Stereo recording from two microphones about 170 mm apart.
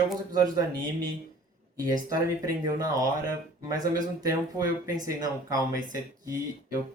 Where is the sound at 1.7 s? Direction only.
20° right (ahead or behind).